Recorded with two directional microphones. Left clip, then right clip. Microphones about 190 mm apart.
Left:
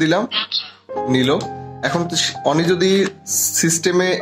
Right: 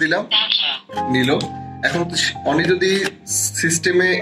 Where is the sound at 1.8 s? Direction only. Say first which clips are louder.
Even; 55° left (ahead or behind).